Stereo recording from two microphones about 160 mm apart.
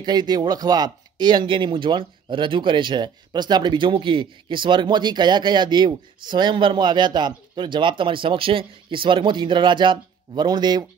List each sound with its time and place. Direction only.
0.0 s speech: 25° right (ahead or behind)